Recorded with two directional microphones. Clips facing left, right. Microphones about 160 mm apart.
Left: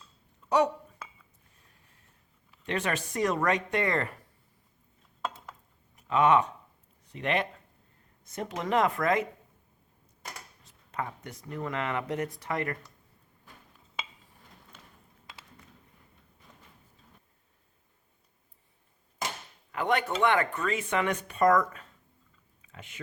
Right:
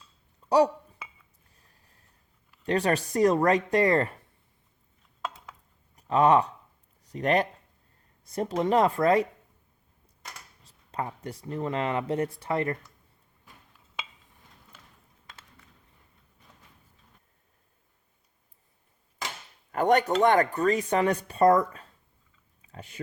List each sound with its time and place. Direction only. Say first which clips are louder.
0.4 s speech: right 4 dB; 35° right (ahead or behind)
2.6 s speech: right 6 dB; 35° right (ahead or behind)
5.2 s dishes: left 1 dB; centre (ahead or behind)
6.0 s speech: right 2 dB; 35° right (ahead or behind)
10.6 s speech: right 3 dB; 30° right (ahead or behind)
19.7 s cutlery: right 6 dB; 45° right (ahead or behind)
20.2 s speech: right 5 dB; 40° right (ahead or behind)
22.6 s chewing: right 4 dB; 35° right (ahead or behind)